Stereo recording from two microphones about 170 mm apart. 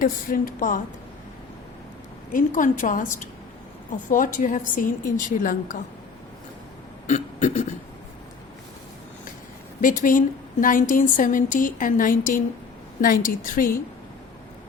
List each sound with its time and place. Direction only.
0.0 s a woman's voice: 50° left (ahead or behind)
2.3 s a woman's voice: 50° left (ahead or behind)
7.1 s a woman's voice: 45° left (ahead or behind)
9.8 s a woman's voice: 50° left (ahead or behind)